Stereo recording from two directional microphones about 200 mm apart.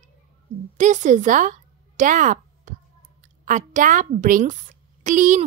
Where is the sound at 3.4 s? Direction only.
40° right (ahead or behind).